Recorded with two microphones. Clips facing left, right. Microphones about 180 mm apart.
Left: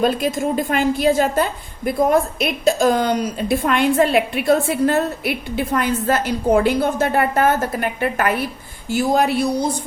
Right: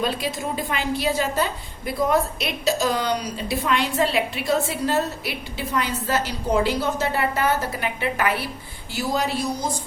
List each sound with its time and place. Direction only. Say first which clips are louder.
0.0 s a woman's voice: left 7 dB; 50° left (ahead or behind)